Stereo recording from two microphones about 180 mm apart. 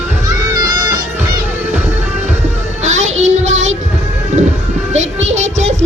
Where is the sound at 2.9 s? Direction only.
90° right.